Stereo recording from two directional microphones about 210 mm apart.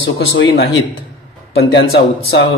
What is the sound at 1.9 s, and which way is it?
Speech, 45° left (ahead or behind).